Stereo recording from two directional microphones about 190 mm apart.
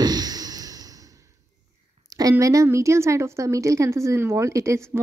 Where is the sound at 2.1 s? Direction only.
20° right (ahead or behind).